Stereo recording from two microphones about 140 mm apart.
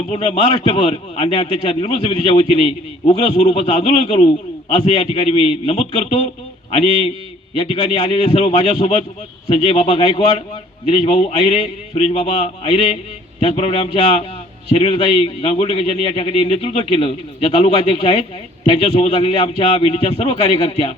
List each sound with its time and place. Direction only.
0.1 s a man's voice: 50° left (ahead or behind)